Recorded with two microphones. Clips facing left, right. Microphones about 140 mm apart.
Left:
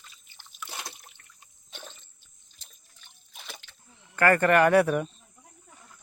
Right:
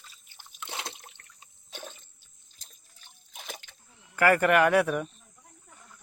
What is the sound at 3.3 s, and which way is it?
Splash, 45° right (ahead or behind).